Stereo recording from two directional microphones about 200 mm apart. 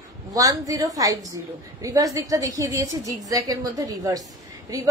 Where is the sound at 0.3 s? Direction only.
15° right (ahead or behind).